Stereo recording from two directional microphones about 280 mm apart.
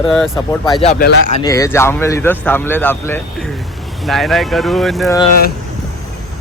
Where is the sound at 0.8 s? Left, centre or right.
Left.